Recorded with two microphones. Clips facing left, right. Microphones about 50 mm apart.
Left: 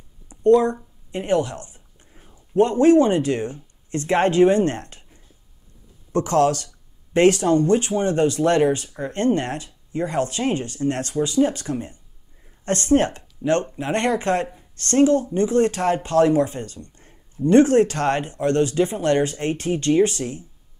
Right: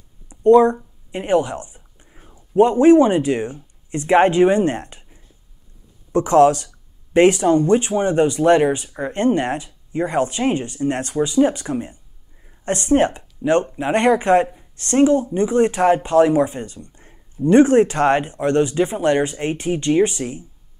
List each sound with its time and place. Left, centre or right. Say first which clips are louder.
0.3 s speech: right 4 dB; right
1.1 s a sound: right 3 dB; right
2.5 s speech: right 3 dB; centre